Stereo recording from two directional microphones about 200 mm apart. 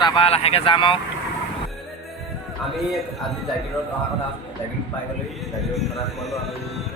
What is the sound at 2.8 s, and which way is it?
Speech, centre (ahead or behind).